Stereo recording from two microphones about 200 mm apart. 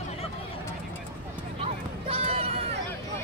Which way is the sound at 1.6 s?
30° right (ahead or behind).